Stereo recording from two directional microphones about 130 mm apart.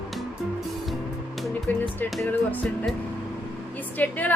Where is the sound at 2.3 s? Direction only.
15° left (ahead or behind).